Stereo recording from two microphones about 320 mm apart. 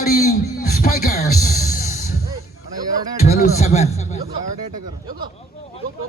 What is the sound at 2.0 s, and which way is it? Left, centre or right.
Music, centre.